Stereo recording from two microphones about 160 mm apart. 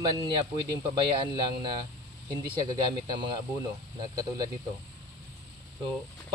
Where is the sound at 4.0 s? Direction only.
25° right (ahead or behind).